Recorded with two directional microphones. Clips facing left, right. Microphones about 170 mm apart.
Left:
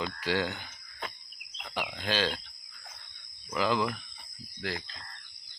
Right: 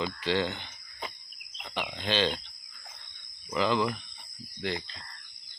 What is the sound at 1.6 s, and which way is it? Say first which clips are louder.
Speech: right 1 dB; 5° left (ahead or behind).